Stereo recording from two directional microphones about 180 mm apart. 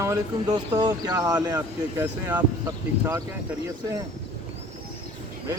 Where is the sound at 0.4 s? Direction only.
30° right (ahead or behind).